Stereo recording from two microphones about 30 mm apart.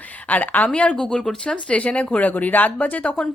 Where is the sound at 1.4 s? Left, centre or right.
Left.